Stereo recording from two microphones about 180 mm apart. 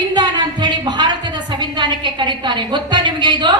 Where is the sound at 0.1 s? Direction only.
25° right (ahead or behind).